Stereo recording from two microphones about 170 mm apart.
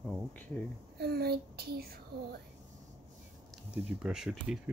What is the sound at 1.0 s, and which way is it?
Whispering, 65° right (ahead or behind).